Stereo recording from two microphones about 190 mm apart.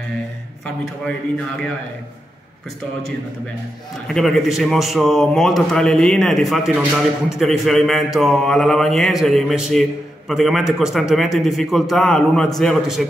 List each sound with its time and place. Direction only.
4.1 s a man's voice: centre (ahead or behind)